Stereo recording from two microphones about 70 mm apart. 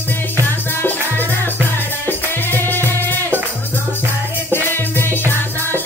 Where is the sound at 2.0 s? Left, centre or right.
Left.